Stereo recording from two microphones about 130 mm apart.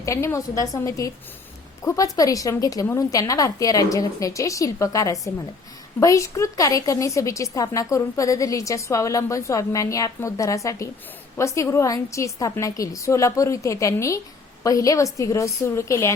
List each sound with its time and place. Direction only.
0.0 s a woman's voice: 25° left (ahead or behind)